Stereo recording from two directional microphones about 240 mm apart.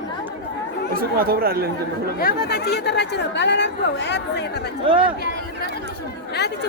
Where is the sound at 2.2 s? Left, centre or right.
Left.